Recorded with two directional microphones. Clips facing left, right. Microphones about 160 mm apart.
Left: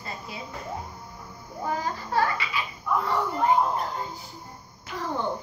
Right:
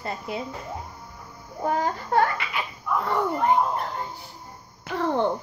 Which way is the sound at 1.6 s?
60° right (ahead or behind).